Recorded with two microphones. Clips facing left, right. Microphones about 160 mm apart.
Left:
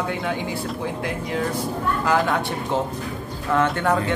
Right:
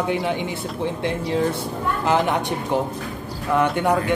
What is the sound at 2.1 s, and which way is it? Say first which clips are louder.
Speech: right 2 dB; 20° right (ahead or behind).